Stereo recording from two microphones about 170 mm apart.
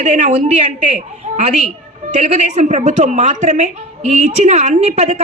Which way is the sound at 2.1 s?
40° right (ahead or behind).